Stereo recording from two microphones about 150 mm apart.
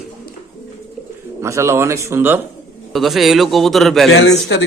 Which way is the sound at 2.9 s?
Centre (ahead or behind).